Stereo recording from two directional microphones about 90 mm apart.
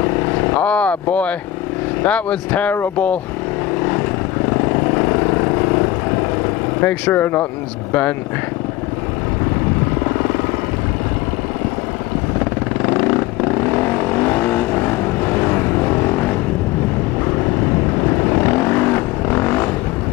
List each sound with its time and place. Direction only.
0.0 s vehicle: 25° left (ahead or behind)
2.0 s speech: 15° left (ahead or behind)
4.5 s vehicle: 25° left (ahead or behind)
6.8 s speech: 20° left (ahead or behind)
10.0 s vehicle: 25° left (ahead or behind)
12.8 s vehicle: 20° left (ahead or behind)
18.0 s vehicle: 20° left (ahead or behind)